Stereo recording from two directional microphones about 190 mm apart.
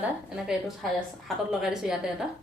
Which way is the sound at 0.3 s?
5° right (ahead or behind).